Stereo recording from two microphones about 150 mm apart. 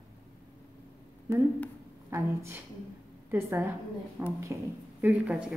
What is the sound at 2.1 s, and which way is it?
A woman's voice, 20° right (ahead or behind).